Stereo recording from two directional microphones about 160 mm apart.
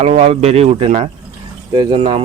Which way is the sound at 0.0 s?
40° right (ahead or behind).